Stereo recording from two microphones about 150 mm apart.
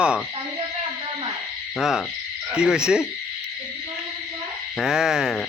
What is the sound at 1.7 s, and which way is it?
Speech, centre (ahead or behind).